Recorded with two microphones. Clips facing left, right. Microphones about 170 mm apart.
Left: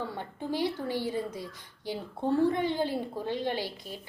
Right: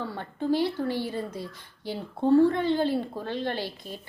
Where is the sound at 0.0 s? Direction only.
15° left (ahead or behind).